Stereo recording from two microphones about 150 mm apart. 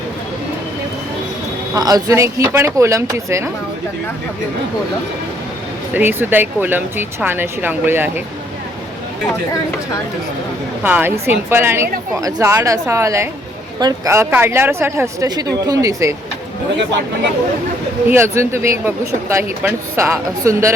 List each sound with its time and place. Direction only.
1.7 s a woman's voice: 25° right (ahead or behind)
5.9 s speech: 15° right (ahead or behind)
10.8 s a woman's voice: 15° right (ahead or behind)
18.1 s speech: 15° right (ahead or behind)